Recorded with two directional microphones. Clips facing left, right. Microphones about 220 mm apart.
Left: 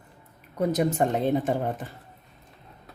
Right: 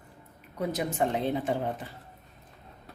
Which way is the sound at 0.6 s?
45° left (ahead or behind).